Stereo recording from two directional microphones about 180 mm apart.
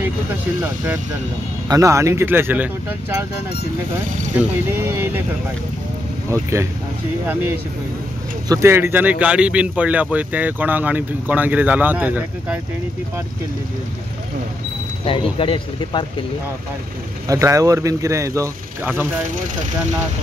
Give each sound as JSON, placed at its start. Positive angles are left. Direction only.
{"t": 1.7, "sound": "speech", "side_deg": -15}
{"t": 4.4, "sound": "speech", "side_deg": -10}
{"t": 6.3, "sound": "speech", "side_deg": -15}
{"t": 8.5, "sound": "speech", "side_deg": -15}
{"t": 15.0, "sound": "speech", "side_deg": 30}
{"t": 17.3, "sound": "speech", "side_deg": -15}